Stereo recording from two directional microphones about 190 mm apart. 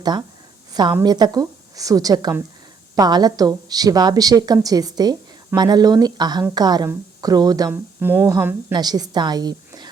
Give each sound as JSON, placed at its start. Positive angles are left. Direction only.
{"t": 0.0, "sound": "a woman's voice", "side_deg": -20}